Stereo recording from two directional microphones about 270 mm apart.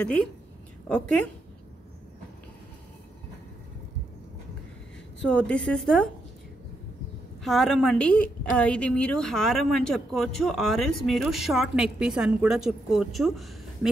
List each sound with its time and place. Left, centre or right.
0.0 s a woman's voice: centre
5.3 s a woman's voice: centre
7.4 s a woman's voice: centre